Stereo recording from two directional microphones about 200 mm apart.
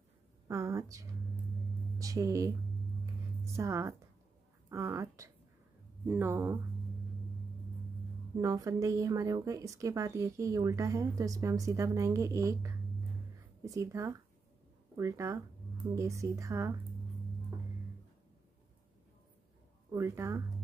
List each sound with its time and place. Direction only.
0.5 s a sound: 15° right (ahead or behind)
2.0 s a woman's voice: 15° right (ahead or behind)
3.5 s a woman's voice: 15° right (ahead or behind)
8.4 s a woman's voice: 15° right (ahead or behind)
19.9 s a woman's voice: 15° right (ahead or behind)